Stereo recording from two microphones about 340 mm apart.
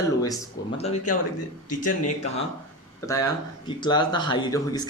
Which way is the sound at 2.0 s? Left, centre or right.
Centre.